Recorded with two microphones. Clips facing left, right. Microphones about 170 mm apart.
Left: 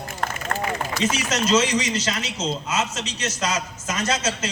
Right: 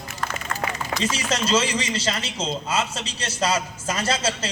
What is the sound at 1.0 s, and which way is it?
A man's voice, 30° right (ahead or behind).